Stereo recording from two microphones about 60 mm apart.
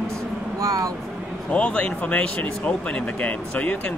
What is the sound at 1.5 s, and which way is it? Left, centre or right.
Speech, left.